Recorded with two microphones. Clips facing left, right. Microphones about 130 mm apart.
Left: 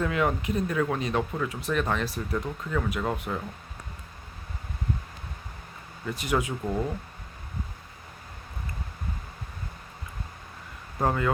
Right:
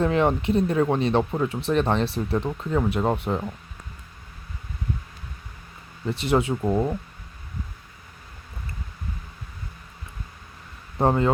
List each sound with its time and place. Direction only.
0.0 s speech: 30° right (ahead or behind)
6.1 s speech: 30° right (ahead or behind)
11.0 s speech: 30° right (ahead or behind)